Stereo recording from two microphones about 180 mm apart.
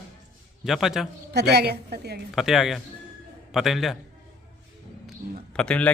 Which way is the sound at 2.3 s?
Centre (ahead or behind).